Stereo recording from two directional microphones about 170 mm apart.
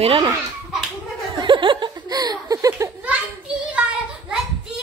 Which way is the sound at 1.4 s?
30° right (ahead or behind).